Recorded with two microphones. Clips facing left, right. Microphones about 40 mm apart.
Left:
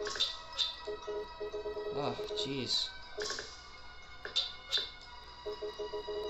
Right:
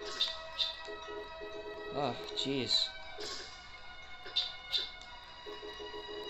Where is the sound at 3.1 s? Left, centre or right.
Centre.